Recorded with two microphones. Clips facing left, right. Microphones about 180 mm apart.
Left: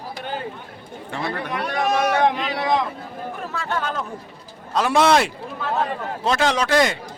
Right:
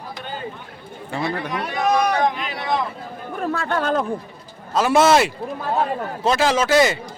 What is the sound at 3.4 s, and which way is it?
Speech, 50° right (ahead or behind).